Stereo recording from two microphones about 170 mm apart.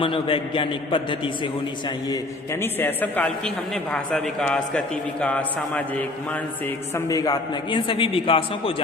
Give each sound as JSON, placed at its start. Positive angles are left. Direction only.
{"t": 0.0, "sound": "a man's voice", "side_deg": 30}
{"t": 2.0, "sound": "a man's voice", "side_deg": 15}
{"t": 6.9, "sound": "a man's voice", "side_deg": 20}